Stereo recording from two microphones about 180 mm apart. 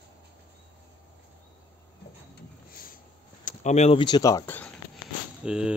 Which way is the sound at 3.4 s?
40° left (ahead or behind).